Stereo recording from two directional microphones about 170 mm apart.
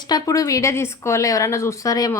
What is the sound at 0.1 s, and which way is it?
A woman's voice, 20° left (ahead or behind).